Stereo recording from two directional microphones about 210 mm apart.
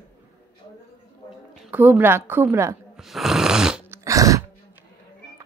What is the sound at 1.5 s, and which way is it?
A woman's voice, 10° right (ahead or behind).